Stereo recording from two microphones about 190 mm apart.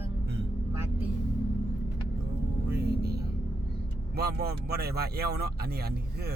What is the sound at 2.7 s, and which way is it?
Speech, 55° right (ahead or behind).